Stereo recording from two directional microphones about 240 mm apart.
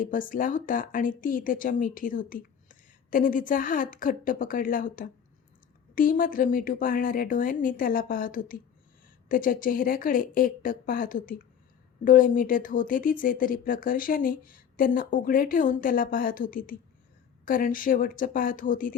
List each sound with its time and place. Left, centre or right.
0.0 s speech: left